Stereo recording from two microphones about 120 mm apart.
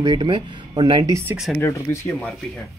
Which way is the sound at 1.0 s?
25° right (ahead or behind).